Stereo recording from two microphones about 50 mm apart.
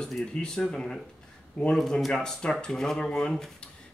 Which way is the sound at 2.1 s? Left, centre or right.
Centre.